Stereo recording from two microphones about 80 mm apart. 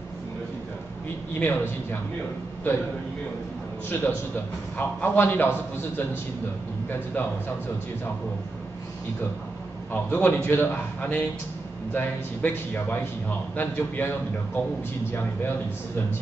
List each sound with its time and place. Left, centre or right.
1.4 s a man's voice: left
4.7 s a man's voice: left
10.1 s a man's voice: centre